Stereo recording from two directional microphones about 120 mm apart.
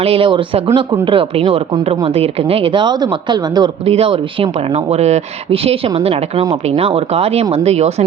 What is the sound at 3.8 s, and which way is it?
A woman's voice, 55° right (ahead or behind).